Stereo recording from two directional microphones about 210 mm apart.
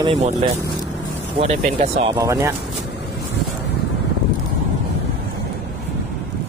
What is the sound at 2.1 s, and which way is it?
Speech, 15° right (ahead or behind).